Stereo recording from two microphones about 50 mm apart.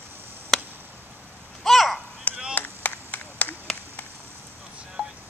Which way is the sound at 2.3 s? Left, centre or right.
Left.